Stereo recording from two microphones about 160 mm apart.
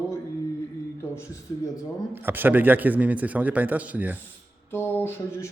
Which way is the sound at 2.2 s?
10° right (ahead or behind).